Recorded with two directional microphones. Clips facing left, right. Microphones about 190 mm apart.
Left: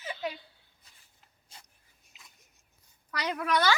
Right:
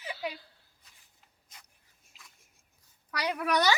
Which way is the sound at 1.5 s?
30° left (ahead or behind).